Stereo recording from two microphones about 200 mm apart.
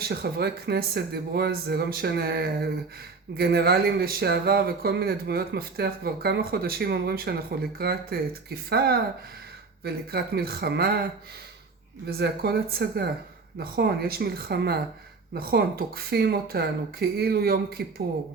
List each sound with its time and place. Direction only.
0.0 s speech: 50° right (ahead or behind)
12.2 s speech: 50° right (ahead or behind)